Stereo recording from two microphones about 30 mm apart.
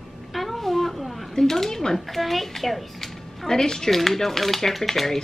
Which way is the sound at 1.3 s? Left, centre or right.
Centre.